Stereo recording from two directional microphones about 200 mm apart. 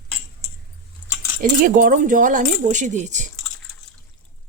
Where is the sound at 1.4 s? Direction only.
45° right (ahead or behind).